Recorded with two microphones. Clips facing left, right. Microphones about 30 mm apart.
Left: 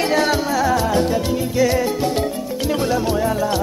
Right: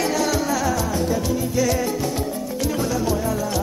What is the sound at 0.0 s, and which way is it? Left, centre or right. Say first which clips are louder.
Music: left 4 dB; left.